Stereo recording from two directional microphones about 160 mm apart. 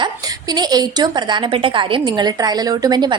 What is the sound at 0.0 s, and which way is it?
A woman's voice, 25° right (ahead or behind).